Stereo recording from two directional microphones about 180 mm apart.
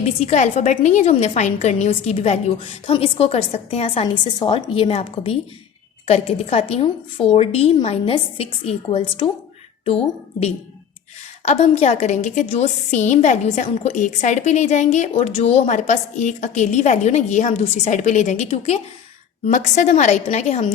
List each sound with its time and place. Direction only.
0.0 s a woman's voice: 35° left (ahead or behind)
11.4 s a woman's voice: 35° left (ahead or behind)